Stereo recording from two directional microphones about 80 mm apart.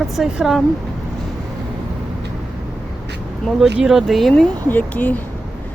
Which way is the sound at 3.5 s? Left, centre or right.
Centre.